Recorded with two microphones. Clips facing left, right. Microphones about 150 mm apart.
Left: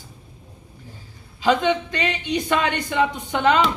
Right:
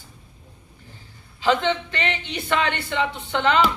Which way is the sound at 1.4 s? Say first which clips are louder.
Left 2 dB; 15° left (ahead or behind).